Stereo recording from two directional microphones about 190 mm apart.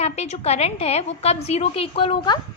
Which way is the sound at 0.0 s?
35° left (ahead or behind).